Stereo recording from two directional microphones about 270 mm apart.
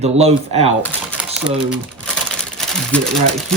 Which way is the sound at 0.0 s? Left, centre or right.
Right.